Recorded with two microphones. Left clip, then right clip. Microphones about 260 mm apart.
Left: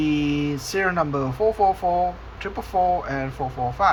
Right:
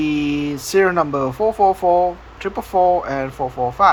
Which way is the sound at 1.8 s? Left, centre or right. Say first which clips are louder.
Right 6 dB; right.